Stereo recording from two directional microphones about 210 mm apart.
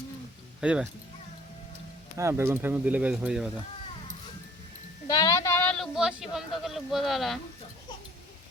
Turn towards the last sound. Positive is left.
turn(degrees=0)  # may be behind; listen again after turning